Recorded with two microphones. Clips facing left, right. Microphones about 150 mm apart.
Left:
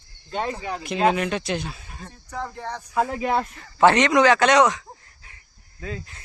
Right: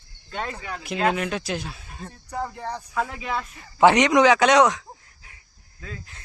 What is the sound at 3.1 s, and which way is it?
Speech, 45° left (ahead or behind).